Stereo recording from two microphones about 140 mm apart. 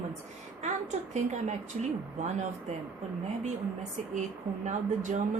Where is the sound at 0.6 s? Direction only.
55° right (ahead or behind).